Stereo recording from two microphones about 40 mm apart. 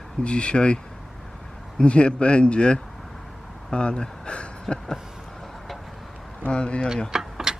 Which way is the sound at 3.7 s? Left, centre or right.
Left.